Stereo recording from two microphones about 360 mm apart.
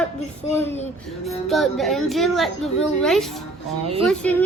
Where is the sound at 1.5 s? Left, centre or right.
Centre.